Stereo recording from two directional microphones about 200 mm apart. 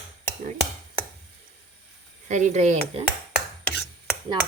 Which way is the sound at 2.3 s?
35° right (ahead or behind).